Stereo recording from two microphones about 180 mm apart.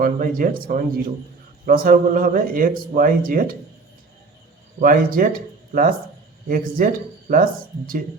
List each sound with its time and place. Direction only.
0.0 s a man's voice: 50° right (ahead or behind)
4.8 s a man's voice: 50° right (ahead or behind)